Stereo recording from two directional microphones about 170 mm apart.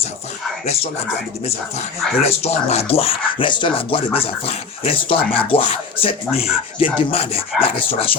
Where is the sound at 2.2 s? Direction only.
40° left (ahead or behind).